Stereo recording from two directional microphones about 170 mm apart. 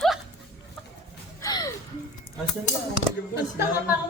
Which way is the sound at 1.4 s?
20° left (ahead or behind).